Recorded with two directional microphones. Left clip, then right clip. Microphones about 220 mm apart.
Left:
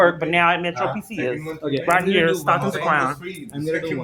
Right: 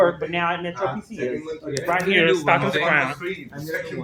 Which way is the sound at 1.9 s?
30° left (ahead or behind).